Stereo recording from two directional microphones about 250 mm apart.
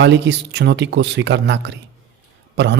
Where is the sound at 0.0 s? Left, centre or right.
Right.